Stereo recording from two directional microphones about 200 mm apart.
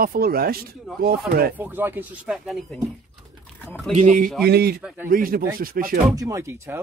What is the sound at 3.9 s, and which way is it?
Speech, 40° right (ahead or behind).